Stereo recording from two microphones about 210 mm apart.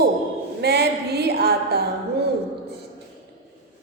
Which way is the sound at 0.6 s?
50° right (ahead or behind).